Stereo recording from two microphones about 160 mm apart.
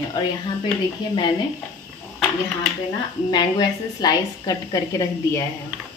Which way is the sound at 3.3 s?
25° left (ahead or behind).